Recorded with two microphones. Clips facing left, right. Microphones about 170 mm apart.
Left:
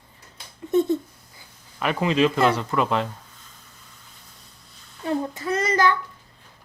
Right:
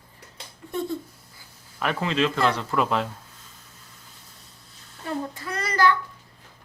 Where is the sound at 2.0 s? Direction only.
15° left (ahead or behind).